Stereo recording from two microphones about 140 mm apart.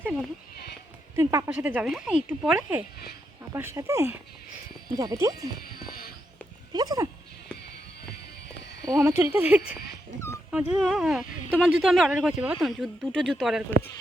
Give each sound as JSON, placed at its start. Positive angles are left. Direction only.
{"t": 1.1, "sound": "speech", "side_deg": -20}
{"t": 1.5, "sound": "speech", "side_deg": -10}
{"t": 5.5, "sound": "music", "side_deg": 90}
{"t": 6.7, "sound": "speech", "side_deg": -25}
{"t": 8.9, "sound": "speech", "side_deg": -20}
{"t": 9.3, "sound": "speech", "side_deg": -10}
{"t": 10.2, "sound": "dog", "side_deg": 20}
{"t": 10.5, "sound": "speech", "side_deg": -5}